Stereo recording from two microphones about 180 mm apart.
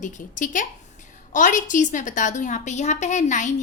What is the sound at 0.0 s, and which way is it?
A woman's voice, 45° left (ahead or behind).